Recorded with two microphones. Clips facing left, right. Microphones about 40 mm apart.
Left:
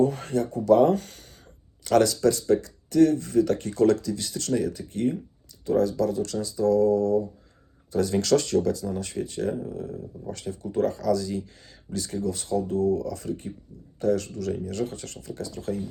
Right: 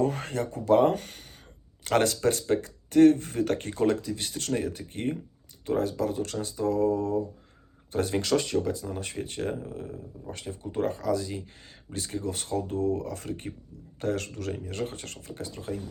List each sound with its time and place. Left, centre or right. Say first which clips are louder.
0.0 s speech: left 4 dB; right
8.2 s speech: left 6 dB; right
14.5 s speech: left 5 dB; right